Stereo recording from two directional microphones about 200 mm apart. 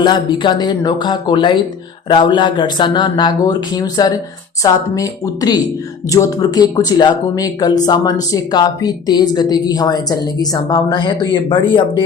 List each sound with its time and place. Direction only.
0.0 s speech: 20° left (ahead or behind)